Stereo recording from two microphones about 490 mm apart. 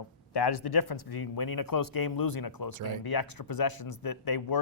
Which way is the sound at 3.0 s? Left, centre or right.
Left.